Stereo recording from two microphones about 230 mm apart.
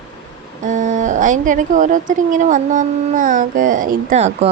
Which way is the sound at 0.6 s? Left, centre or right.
Right.